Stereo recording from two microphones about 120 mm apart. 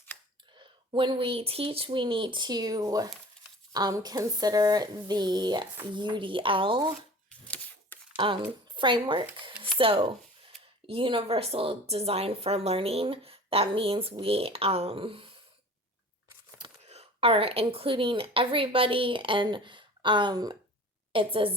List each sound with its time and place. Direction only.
0.9 s a woman's voice: 45° right (ahead or behind)
7.3 s typewriter: 10° left (ahead or behind)
8.1 s speech: 45° right (ahead or behind)
16.8 s speech: 60° right (ahead or behind); by 20.6 s 35° right (ahead or behind)
21.1 s a woman's voice: 45° right (ahead or behind)